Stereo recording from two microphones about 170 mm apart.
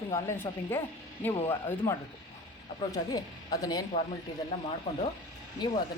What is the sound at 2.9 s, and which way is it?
Speech, 20° left (ahead or behind).